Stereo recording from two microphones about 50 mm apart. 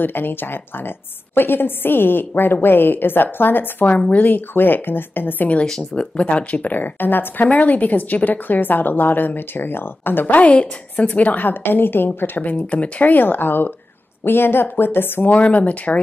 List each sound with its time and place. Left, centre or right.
0.0 s a woman's voice: left
4.1 s a woman's voice: left
5.9 s a woman's voice: left
7.4 s a woman's voice: left
10.2 s a woman's voice: left
12.4 s a woman's voice: left
15.3 s speech: left